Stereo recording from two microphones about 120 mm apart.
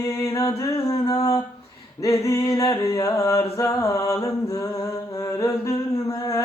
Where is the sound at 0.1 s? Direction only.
25° left (ahead or behind).